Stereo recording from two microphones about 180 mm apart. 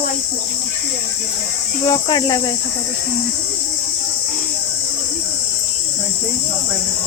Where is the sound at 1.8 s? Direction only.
20° left (ahead or behind).